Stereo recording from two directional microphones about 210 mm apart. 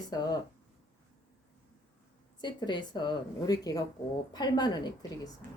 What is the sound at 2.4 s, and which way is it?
A woman's voice, 20° left (ahead or behind).